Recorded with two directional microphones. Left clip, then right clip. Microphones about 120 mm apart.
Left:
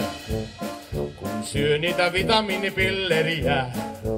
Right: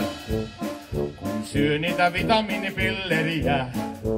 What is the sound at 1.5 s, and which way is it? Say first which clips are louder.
Music: left 2 dB; 55° left (ahead or behind).